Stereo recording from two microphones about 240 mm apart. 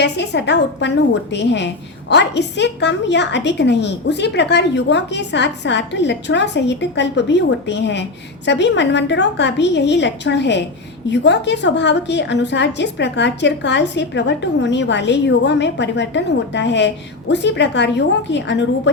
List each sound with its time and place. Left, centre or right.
0.0 s a woman's voice: left